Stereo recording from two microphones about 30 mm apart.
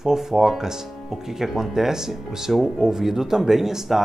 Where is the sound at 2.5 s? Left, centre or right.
Centre.